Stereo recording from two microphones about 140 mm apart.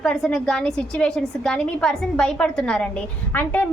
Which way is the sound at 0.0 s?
5° left (ahead or behind).